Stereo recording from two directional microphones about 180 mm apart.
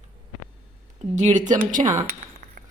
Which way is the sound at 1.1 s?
40° right (ahead or behind).